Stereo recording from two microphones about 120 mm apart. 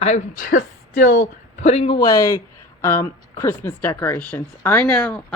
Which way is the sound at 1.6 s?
55° left (ahead or behind).